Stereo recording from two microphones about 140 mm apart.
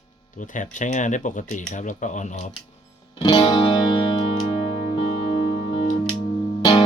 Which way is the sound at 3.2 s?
30° left (ahead or behind).